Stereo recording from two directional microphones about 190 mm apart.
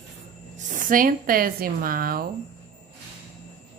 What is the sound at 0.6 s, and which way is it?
Speech, 40° right (ahead or behind).